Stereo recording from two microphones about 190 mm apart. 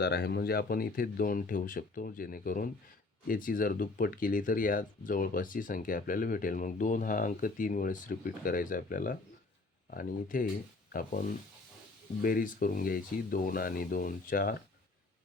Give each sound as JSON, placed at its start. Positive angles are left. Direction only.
{"t": 0.0, "sound": "speech", "side_deg": 60}